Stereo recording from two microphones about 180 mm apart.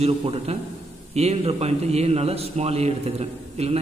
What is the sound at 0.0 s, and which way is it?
A man's voice, 35° right (ahead or behind).